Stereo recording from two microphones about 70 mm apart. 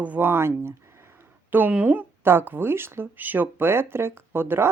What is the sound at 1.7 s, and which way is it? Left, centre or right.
Speech, right.